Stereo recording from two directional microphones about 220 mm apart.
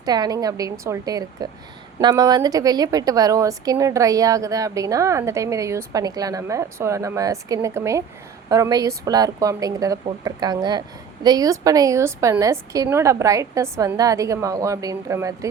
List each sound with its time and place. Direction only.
0.0 s a woman's voice: 20° right (ahead or behind)